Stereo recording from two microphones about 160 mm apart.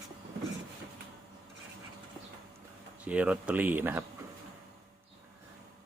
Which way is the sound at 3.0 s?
10° right (ahead or behind).